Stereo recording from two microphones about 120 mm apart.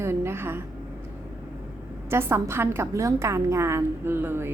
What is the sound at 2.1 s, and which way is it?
A woman's voice, 20° right (ahead or behind).